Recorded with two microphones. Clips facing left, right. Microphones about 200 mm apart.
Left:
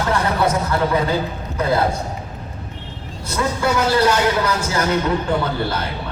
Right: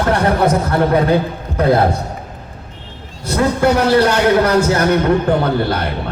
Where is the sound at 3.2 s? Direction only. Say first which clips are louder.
Right 6 dB; 60° right (ahead or behind).